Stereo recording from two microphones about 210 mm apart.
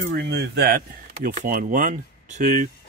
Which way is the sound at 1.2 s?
40° right (ahead or behind).